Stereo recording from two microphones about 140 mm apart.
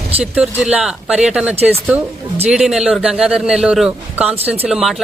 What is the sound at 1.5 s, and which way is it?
Speech, 45° right (ahead or behind).